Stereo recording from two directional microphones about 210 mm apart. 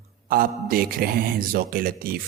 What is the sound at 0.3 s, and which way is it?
A man's voice, 45° right (ahead or behind).